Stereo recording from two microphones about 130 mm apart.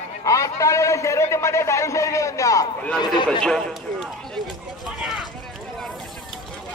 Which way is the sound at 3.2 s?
5° left (ahead or behind).